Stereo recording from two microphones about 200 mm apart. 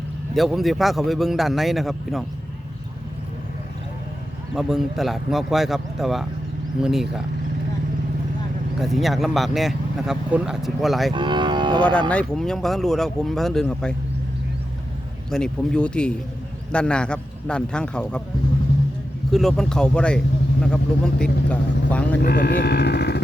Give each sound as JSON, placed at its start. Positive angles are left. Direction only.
{"t": 0.3, "sound": "speech", "side_deg": 0}
{"t": 4.5, "sound": "speech", "side_deg": 0}
{"t": 8.8, "sound": "speech", "side_deg": 0}
{"t": 11.1, "sound": "cattle", "side_deg": -25}
{"t": 11.9, "sound": "speech", "side_deg": 5}
{"t": 15.3, "sound": "speech", "side_deg": 5}
{"t": 19.3, "sound": "speech", "side_deg": 0}
{"t": 22.2, "sound": "speech", "side_deg": 55}